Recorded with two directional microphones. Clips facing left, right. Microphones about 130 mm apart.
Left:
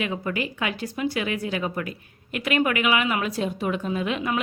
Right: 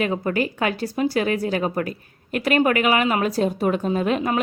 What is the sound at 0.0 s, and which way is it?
A woman's voice, 40° right (ahead or behind).